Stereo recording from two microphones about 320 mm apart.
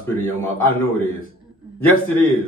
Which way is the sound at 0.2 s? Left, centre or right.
Centre.